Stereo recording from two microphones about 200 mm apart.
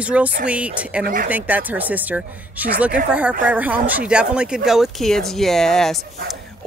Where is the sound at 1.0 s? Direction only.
45° right (ahead or behind).